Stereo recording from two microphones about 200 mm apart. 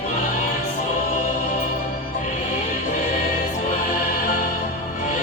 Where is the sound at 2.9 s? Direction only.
45° left (ahead or behind).